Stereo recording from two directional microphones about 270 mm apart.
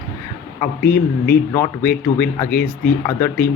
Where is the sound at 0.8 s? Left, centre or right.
Left.